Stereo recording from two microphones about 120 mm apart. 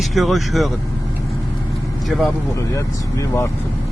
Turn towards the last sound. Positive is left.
turn(degrees=25)  # may be behind; listen again after turning